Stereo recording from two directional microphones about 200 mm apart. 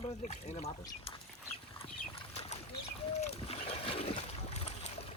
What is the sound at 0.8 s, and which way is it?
Speech, 25° left (ahead or behind).